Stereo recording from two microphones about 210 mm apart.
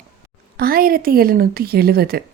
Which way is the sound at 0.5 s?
45° right (ahead or behind).